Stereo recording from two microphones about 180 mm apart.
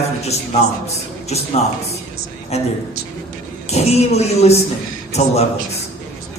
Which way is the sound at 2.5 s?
35° left (ahead or behind).